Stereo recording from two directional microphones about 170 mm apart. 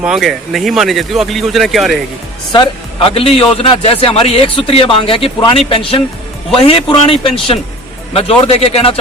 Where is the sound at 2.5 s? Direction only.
30° left (ahead or behind).